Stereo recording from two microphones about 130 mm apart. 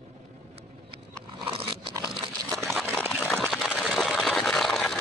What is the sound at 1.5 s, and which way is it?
Biting, 40° right (ahead or behind).